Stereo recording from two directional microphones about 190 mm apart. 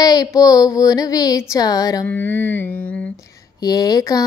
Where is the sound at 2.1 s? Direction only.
10° left (ahead or behind).